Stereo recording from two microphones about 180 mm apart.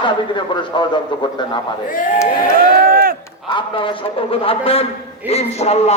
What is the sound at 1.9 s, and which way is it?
Speech, 50° left (ahead or behind).